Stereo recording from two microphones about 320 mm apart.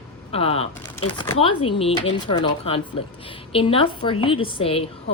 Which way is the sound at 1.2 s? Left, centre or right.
Centre.